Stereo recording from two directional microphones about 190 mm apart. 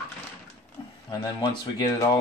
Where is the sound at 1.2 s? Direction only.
25° left (ahead or behind).